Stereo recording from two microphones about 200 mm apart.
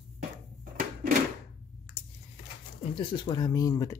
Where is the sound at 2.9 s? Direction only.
25° left (ahead or behind).